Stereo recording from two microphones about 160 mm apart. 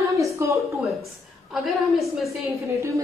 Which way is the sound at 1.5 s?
Centre (ahead or behind).